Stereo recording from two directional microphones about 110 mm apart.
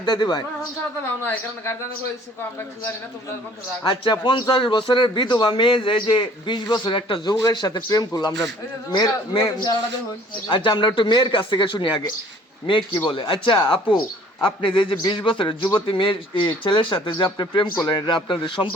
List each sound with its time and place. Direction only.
0.0 s a man's voice: 45° left (ahead or behind)
1.0 s speech: 20° left (ahead or behind)
3.8 s a man's voice: 45° left (ahead or behind)